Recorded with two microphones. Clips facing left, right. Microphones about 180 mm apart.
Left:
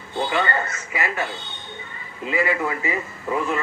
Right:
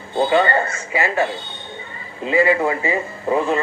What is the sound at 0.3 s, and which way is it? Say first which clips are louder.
Speech: right 7 dB; 30° right (ahead or behind).